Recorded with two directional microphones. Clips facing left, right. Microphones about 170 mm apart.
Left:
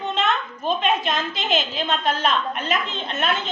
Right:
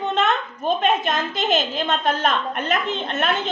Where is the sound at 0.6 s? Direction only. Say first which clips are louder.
Right 2 dB; 50° right (ahead or behind).